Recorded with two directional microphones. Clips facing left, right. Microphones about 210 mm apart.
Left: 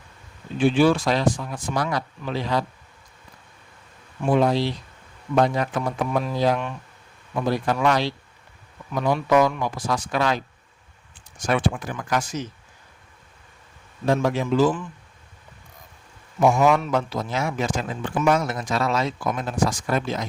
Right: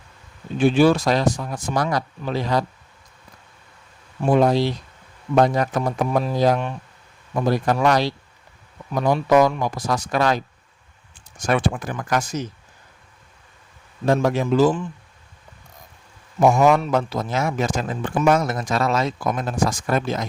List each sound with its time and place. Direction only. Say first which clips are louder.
0.6 s speech: right 2 dB; 40° right (ahead or behind)
4.2 s a man's voice: right 3 dB; 45° right (ahead or behind)
14.1 s a man's voice: right 2 dB; 45° right (ahead or behind)
16.4 s a man's voice: right 2 dB; 45° right (ahead or behind)